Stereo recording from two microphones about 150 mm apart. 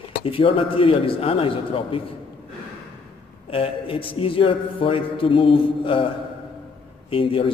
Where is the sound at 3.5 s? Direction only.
40° left (ahead or behind).